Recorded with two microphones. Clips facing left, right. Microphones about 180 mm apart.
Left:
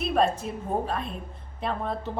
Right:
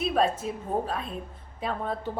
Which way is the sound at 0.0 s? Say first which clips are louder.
Left 1 dB; centre (ahead or behind).